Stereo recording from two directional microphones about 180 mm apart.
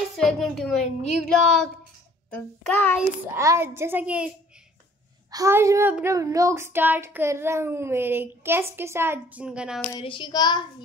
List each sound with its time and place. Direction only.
0.2 s a woman's voice: centre (ahead or behind)
2.3 s child singing: 10° left (ahead or behind)
3.3 s child singing: 15° right (ahead or behind)
5.3 s child singing: 15° right (ahead or behind)
9.9 s child singing: 25° left (ahead or behind)